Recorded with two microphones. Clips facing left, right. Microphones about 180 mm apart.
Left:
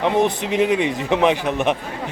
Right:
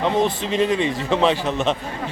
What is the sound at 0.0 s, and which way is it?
A man's voice, 15° left (ahead or behind).